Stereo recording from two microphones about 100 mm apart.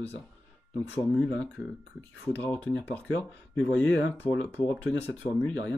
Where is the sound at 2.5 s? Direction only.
15° left (ahead or behind).